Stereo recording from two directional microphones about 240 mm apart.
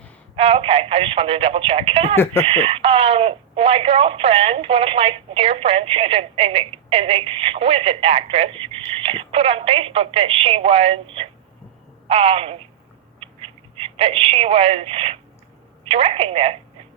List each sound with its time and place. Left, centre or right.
0.3 s speech: right
2.1 s speech: centre
2.4 s speech: right
13.7 s speech: right